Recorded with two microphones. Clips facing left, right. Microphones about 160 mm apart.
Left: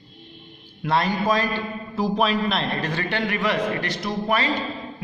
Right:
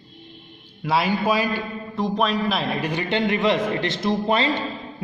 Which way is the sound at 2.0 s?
5° left (ahead or behind).